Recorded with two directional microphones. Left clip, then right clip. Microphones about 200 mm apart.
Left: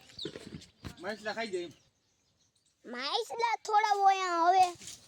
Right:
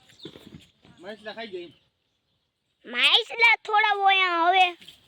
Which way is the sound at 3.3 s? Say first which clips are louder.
Right 11 dB; 20° right (ahead or behind).